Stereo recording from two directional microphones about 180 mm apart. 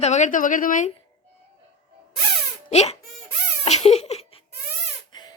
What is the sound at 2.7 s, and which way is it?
Speech, 35° left (ahead or behind).